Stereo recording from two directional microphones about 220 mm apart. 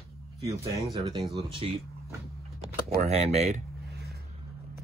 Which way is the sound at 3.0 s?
30° right (ahead or behind).